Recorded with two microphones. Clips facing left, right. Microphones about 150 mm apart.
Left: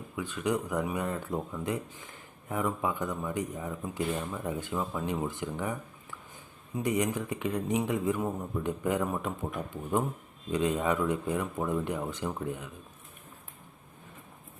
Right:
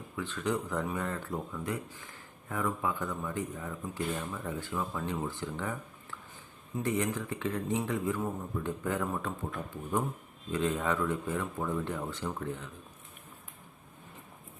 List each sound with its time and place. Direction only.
0.2 s speech: 10° left (ahead or behind)